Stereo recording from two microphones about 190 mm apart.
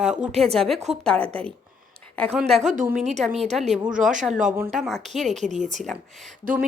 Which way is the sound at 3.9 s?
40° right (ahead or behind).